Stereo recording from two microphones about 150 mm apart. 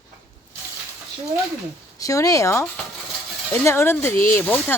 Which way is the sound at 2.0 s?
20° left (ahead or behind).